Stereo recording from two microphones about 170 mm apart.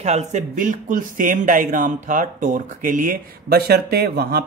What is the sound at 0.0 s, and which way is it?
Speech, 40° right (ahead or behind).